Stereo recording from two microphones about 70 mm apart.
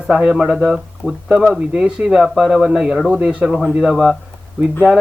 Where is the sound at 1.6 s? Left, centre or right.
Centre.